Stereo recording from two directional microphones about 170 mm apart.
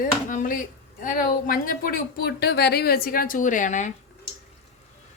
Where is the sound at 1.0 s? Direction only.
55° left (ahead or behind).